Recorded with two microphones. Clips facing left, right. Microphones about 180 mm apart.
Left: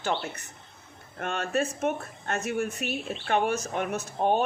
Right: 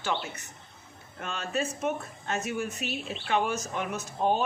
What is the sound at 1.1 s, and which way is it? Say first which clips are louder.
Speech: left 4 dB; 55° left (ahead or behind).